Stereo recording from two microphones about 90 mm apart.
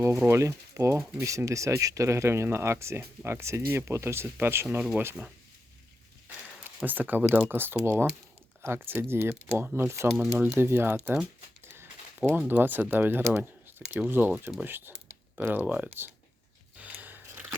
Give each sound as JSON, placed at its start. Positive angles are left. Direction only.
{"t": 0.3, "sound": "speech", "side_deg": -30}
{"t": 6.8, "sound": "speech", "side_deg": -20}
{"t": 12.5, "sound": "speech", "side_deg": -20}
{"t": 16.8, "sound": "biting", "side_deg": -20}